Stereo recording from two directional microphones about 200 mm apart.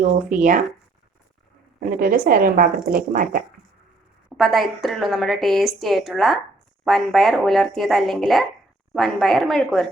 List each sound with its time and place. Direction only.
0.0 s speech: 40° right (ahead or behind)
1.8 s speech: 45° right (ahead or behind)
4.3 s a woman's voice: centre (ahead or behind)